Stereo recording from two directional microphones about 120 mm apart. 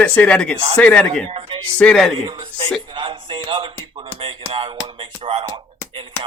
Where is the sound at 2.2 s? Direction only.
45° right (ahead or behind).